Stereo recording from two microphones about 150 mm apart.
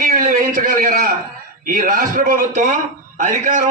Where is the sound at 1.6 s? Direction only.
65° right (ahead or behind).